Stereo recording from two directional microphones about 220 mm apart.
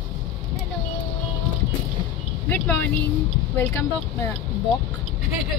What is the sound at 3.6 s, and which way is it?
Speech, 10° left (ahead or behind).